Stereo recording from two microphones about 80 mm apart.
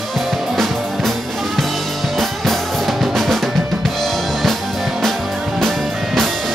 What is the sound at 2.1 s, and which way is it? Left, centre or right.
Drum kit, centre.